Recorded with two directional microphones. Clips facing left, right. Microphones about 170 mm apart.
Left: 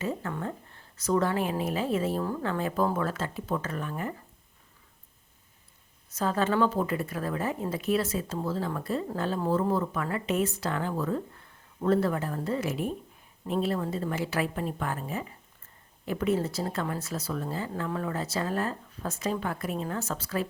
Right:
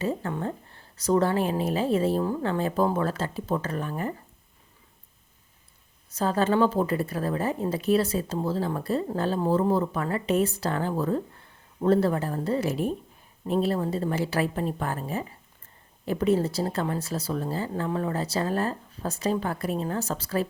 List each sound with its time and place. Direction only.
0.0 s speech: 30° right (ahead or behind)
6.1 s speech: 30° right (ahead or behind)